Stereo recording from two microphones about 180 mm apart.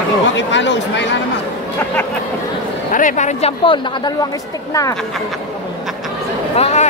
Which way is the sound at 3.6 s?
25° left (ahead or behind).